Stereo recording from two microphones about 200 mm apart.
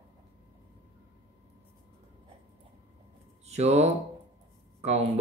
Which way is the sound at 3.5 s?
30° right (ahead or behind).